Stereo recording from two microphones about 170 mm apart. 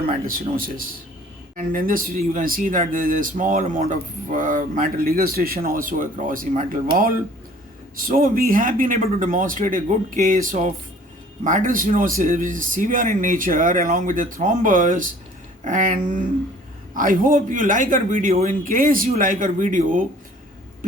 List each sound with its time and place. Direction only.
0.3 s speech: 55° right (ahead or behind)